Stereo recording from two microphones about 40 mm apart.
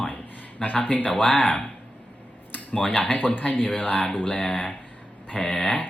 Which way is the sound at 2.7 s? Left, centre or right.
Left.